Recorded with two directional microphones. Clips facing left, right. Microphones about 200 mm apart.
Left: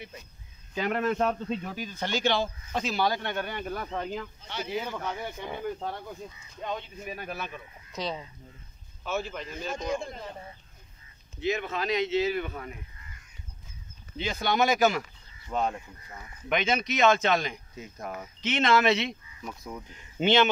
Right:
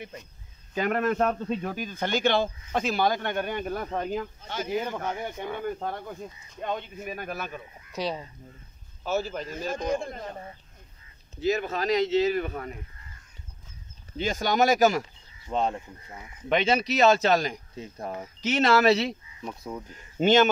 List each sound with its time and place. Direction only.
0.7 s speech: 50° right (ahead or behind)
7.9 s speech: 10° right (ahead or behind)
9.0 s speech: 40° right (ahead or behind)
11.3 s speech: 40° right (ahead or behind)
14.1 s speech: 45° right (ahead or behind)
15.5 s speech: 30° right (ahead or behind)
20.2 s speech: 45° right (ahead or behind)